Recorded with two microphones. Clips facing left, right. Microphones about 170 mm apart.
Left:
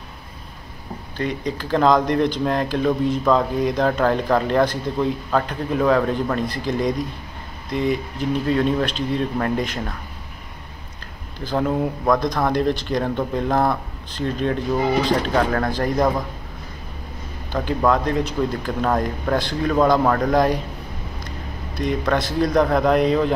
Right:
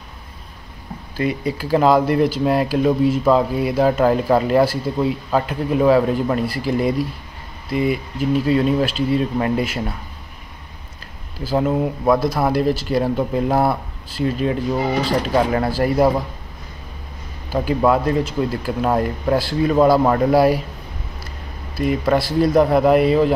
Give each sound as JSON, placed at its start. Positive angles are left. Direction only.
{"t": 1.1, "sound": "speech", "side_deg": -10}
{"t": 11.3, "sound": "speech", "side_deg": -5}
{"t": 17.5, "sound": "speech", "side_deg": -5}
{"t": 21.7, "sound": "speech", "side_deg": -5}